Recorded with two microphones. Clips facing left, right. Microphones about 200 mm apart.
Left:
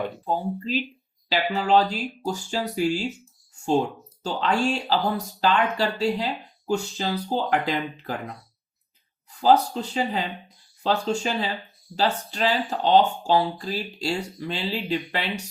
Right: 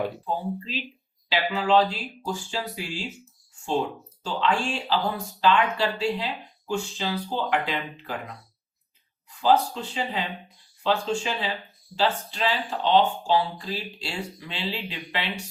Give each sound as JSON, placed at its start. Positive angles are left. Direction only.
{"t": 0.3, "sound": "speech", "side_deg": 40}
{"t": 4.2, "sound": "speech", "side_deg": 40}